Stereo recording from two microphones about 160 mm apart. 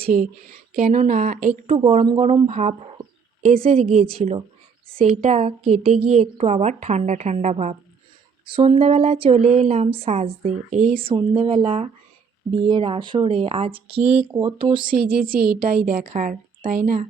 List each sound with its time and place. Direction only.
0.0 s a woman's voice: 55° right (ahead or behind)
1.6 s a woman's voice: 35° right (ahead or behind)
8.4 s speech: 35° right (ahead or behind)
14.0 s speech: 10° right (ahead or behind)
14.3 s speech: 30° right (ahead or behind)
14.8 s a woman's voice: 65° right (ahead or behind)
15.9 s a woman's voice: 55° right (ahead or behind)